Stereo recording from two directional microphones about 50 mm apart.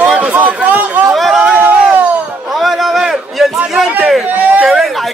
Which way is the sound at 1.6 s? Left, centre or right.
Right.